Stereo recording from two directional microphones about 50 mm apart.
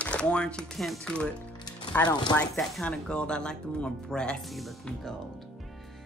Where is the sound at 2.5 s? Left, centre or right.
Centre.